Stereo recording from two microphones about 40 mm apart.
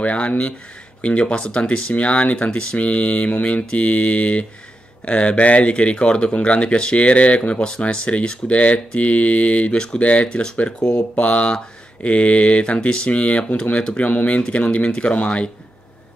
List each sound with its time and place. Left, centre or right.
0.0 s speech: left